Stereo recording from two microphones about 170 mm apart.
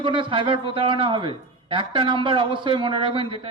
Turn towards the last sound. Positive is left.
turn(degrees=-30)  # may be behind; listen again after turning